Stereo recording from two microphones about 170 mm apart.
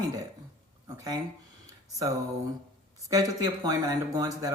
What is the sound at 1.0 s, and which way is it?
Speech, 20° right (ahead or behind).